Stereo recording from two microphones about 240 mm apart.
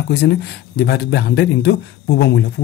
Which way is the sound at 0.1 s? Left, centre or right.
Left.